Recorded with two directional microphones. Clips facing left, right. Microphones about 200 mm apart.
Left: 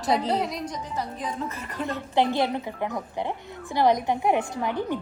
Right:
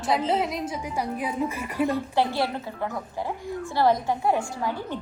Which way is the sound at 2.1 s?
20° left (ahead or behind).